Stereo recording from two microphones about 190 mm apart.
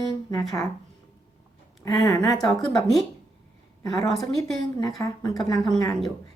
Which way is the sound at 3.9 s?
Centre (ahead or behind).